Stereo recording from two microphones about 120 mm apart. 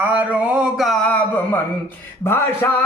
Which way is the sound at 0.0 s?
15° right (ahead or behind).